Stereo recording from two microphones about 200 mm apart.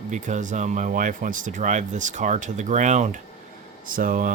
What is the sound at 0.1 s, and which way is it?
Speech, 40° right (ahead or behind).